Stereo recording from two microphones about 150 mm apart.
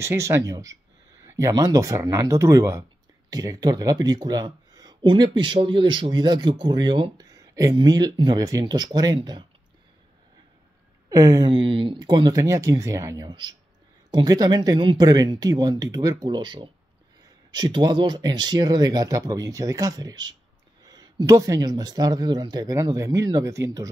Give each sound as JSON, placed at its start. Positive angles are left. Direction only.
{"t": 0.0, "sound": "speech", "side_deg": -20}
{"t": 11.1, "sound": "speech", "side_deg": -25}